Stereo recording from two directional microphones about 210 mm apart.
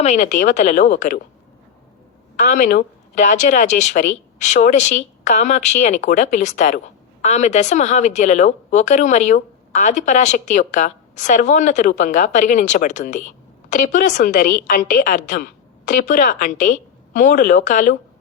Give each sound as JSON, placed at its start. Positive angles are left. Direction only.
{"t": 0.0, "sound": "speech", "side_deg": 35}
{"t": 2.4, "sound": "speech", "side_deg": 35}